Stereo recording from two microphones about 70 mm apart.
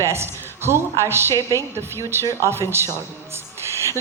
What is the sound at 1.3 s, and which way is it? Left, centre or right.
Speech, left.